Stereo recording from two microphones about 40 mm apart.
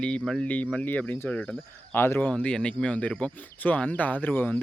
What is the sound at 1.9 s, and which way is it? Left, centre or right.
Speech, left.